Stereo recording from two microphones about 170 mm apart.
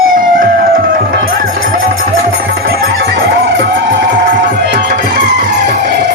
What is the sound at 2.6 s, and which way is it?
Music, 75° right (ahead or behind).